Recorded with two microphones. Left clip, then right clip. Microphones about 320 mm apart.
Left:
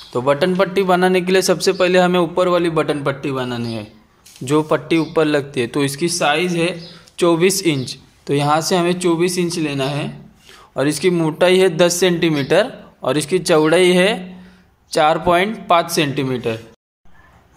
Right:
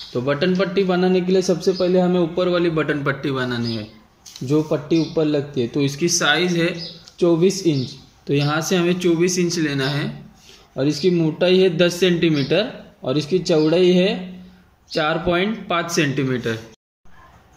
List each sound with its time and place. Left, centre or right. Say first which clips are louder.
0.2 s a man's voice: left 4 dB; centre
4.6 s a man's voice: left 3 dB; left
7.2 s a man's voice: left 2 dB; left; by 10.0 s centre
10.8 s a man's voice: left 2 dB; left